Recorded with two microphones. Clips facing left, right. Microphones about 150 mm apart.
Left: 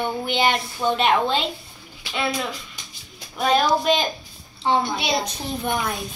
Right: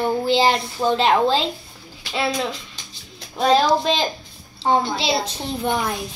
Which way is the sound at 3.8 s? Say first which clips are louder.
Even; 30° right (ahead or behind).